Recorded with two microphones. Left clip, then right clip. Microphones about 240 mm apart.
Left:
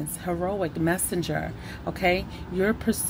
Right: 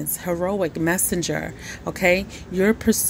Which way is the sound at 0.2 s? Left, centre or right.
Right.